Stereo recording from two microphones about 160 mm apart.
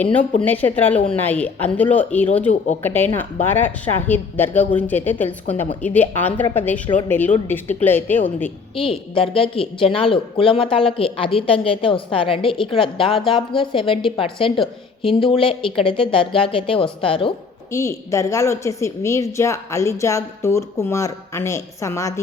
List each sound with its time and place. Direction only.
0.4 s a woman's voice: 10° left (ahead or behind)
8.7 s a woman's voice: 35° left (ahead or behind)
17.7 s a woman's voice: 20° left (ahead or behind)